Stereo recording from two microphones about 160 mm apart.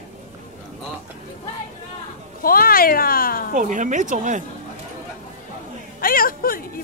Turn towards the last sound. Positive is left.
turn(degrees=65)  # may be behind; listen again after turning